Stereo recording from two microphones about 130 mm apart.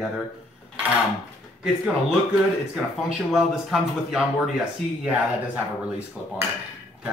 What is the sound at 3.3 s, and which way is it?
Speech, 5° right (ahead or behind).